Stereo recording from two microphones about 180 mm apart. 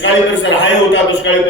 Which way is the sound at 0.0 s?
90° left.